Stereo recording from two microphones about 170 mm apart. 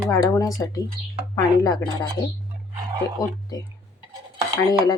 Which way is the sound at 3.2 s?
20° left (ahead or behind).